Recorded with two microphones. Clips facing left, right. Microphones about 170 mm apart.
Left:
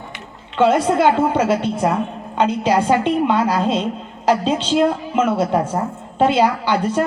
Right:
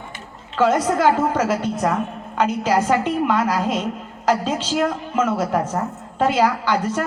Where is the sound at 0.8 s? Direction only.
25° left (ahead or behind).